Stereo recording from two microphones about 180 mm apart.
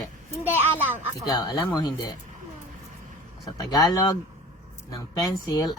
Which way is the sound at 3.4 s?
20° left (ahead or behind).